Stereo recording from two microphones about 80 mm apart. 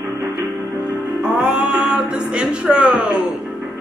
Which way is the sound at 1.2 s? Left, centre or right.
Centre.